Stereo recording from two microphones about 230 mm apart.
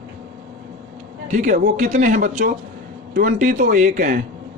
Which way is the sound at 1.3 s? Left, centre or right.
Right.